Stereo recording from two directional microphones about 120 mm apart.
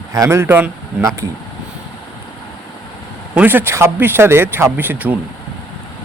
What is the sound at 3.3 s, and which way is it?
Speech, 15° right (ahead or behind).